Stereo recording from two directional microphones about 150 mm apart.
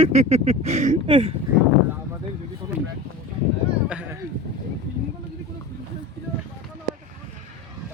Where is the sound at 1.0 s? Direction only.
35° right (ahead or behind).